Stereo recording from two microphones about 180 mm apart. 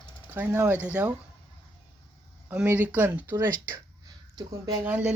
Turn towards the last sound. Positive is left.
turn(degrees=-5)  # may be behind; listen again after turning